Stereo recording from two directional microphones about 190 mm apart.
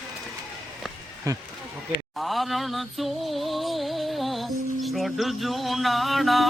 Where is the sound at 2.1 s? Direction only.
Centre (ahead or behind).